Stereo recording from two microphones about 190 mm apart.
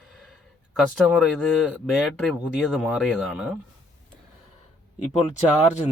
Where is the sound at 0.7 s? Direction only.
Centre (ahead or behind).